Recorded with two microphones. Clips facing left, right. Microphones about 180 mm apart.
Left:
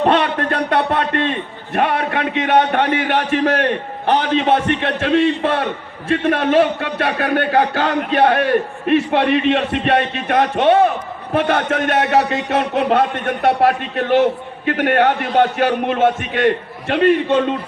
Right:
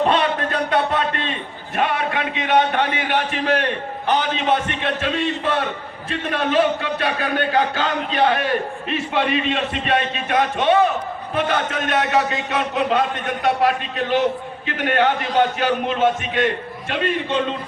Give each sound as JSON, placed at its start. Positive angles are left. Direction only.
{"t": 0.1, "sound": "a man's voice", "side_deg": 65}